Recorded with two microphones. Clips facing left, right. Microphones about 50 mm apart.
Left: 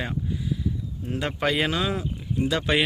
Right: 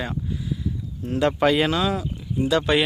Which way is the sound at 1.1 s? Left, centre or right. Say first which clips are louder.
Right 6 dB; centre.